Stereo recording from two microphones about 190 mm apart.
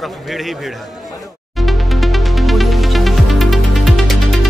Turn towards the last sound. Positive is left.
turn(degrees=0)  # may be behind; listen again after turning